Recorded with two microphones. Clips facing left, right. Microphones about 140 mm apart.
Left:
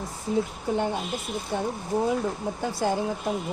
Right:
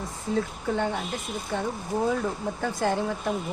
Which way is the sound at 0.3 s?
15° left (ahead or behind).